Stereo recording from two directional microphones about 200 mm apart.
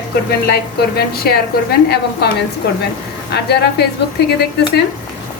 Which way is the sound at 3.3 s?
55° left (ahead or behind).